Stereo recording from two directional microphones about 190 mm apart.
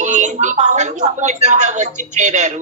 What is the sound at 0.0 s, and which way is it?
A man's voice, 40° right (ahead or behind).